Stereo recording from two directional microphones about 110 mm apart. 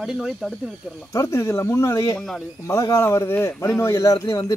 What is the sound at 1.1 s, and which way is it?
Speech, 30° left (ahead or behind).